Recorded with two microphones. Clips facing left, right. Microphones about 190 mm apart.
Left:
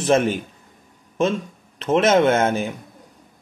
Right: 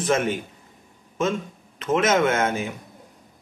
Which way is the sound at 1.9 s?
30° left (ahead or behind).